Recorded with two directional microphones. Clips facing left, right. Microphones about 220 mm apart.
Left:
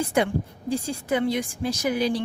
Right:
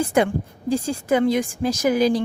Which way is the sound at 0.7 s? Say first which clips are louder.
Right 5 dB; 45° right (ahead or behind).